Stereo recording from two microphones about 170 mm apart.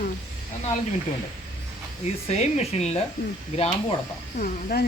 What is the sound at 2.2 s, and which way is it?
Speech, 40° left (ahead or behind).